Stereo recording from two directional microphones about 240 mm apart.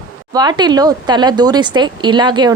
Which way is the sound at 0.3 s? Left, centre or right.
Centre.